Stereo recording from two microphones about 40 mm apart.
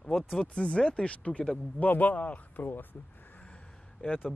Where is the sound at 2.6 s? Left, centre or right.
Left.